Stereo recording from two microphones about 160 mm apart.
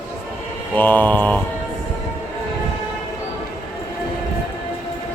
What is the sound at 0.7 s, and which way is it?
Mantra, 10° left (ahead or behind).